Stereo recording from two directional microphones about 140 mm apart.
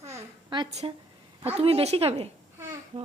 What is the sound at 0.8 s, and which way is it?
A woman's voice, 35° right (ahead or behind).